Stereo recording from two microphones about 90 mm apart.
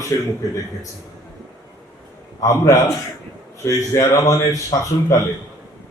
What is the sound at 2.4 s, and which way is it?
A man's voice, 40° left (ahead or behind).